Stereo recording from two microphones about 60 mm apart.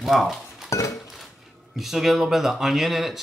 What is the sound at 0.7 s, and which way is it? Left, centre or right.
Dishes, left.